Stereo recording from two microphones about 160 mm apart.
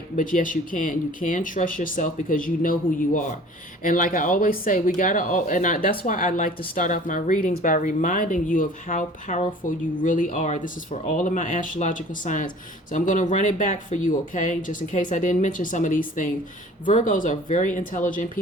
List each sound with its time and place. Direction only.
0.2 s speech: 55° left (ahead or behind)